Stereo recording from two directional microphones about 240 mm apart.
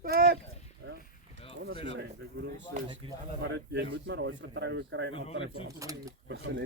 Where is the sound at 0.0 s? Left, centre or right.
Right.